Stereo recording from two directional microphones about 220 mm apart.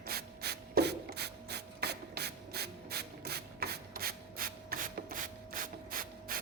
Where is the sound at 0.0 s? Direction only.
45° right (ahead or behind).